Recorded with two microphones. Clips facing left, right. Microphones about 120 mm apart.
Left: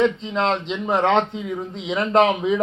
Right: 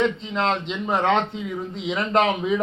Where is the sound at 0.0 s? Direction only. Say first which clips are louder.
Left 3 dB; 25° left (ahead or behind).